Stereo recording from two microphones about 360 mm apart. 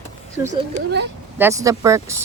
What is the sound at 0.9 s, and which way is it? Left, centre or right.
Speech, right.